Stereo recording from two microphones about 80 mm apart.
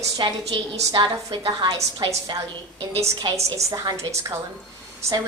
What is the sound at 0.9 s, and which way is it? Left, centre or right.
Speech, right.